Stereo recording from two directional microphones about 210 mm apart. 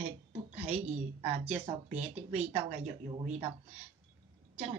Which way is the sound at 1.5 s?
30° right (ahead or behind).